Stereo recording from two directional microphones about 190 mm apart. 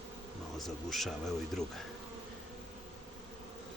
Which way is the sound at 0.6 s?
Centre (ahead or behind).